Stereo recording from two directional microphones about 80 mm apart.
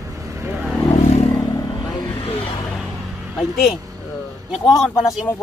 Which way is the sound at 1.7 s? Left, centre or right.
Left.